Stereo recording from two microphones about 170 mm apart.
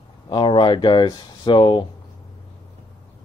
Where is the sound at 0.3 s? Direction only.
30° left (ahead or behind).